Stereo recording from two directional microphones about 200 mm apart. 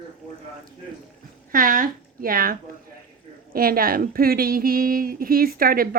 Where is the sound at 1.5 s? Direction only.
45° right (ahead or behind).